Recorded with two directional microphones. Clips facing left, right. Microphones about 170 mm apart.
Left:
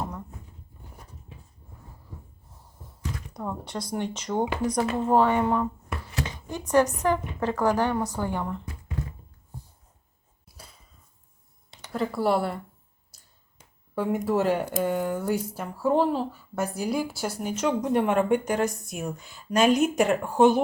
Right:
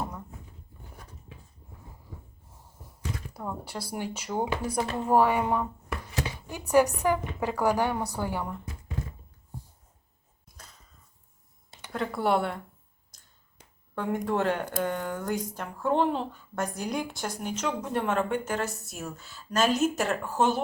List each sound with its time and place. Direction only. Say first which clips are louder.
3.3 s speech: left 5 dB; 5° right (ahead or behind)
10.5 s a sound: left 3 dB; 5° left (ahead or behind)
11.9 s speech: left 2 dB; centre (ahead or behind)
13.1 s finger snapping: left 1 dB; 10° left (ahead or behind)
13.9 s speech: left 3 dB; 5° left (ahead or behind)